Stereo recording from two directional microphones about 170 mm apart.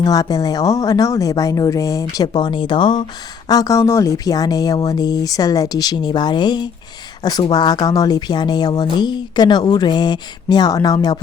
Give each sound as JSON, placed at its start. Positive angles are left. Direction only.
{"t": 0.0, "sound": "speech", "side_deg": 20}